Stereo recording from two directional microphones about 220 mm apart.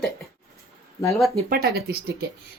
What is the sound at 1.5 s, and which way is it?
Speech, 45° right (ahead or behind).